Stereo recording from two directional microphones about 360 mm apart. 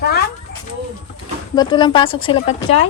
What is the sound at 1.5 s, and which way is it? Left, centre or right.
Speech, centre.